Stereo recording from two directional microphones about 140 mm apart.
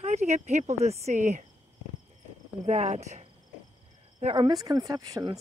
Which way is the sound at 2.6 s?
55° right (ahead or behind).